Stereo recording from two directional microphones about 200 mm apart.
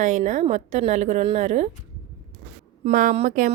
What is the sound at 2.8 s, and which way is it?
Speech, 40° right (ahead or behind).